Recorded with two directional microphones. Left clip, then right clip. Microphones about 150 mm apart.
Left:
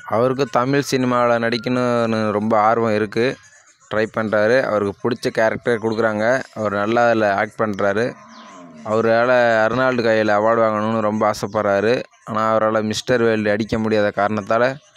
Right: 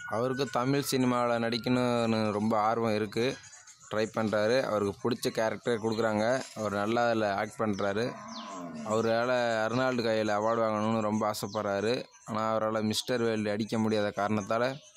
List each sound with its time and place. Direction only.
0.1 s speech: 40° left (ahead or behind)